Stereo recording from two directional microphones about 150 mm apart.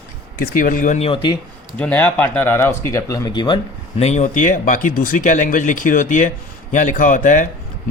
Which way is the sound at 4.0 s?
50° left (ahead or behind).